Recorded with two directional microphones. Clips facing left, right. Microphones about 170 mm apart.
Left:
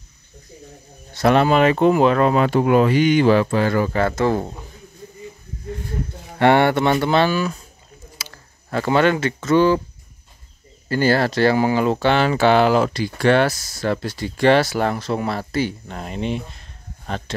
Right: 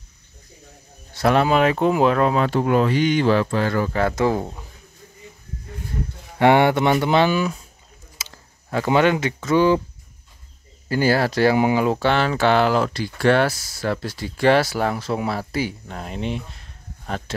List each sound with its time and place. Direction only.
1.1 s speech: 5° right (ahead or behind)
4.1 s speech: 10° right (ahead or behind)
6.3 s speech: 10° right (ahead or behind)
8.2 s a sound: 20° right (ahead or behind)
8.6 s speech: 10° right (ahead or behind)
10.9 s speech: 10° right (ahead or behind)